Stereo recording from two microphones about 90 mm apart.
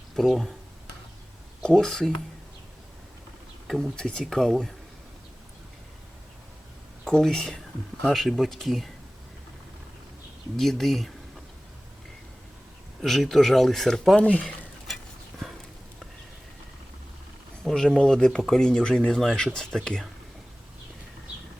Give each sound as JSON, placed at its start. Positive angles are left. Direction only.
{"t": 0.2, "sound": "speech", "side_deg": 0}
{"t": 1.6, "sound": "speech", "side_deg": 5}
{"t": 3.7, "sound": "speech", "side_deg": 10}
{"t": 7.0, "sound": "speech", "side_deg": 5}
{"t": 10.6, "sound": "speech", "side_deg": 5}
{"t": 13.0, "sound": "speech", "side_deg": 0}
{"t": 14.2, "sound": "speech", "side_deg": 15}
{"t": 17.6, "sound": "speech", "side_deg": 5}